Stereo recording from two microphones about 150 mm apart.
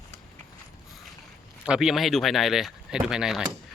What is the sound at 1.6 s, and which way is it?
Speech, 5° right (ahead or behind).